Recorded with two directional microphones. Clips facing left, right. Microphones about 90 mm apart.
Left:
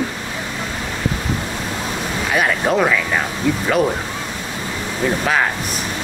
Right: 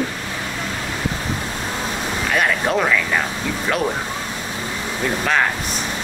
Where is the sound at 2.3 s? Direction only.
5° left (ahead or behind).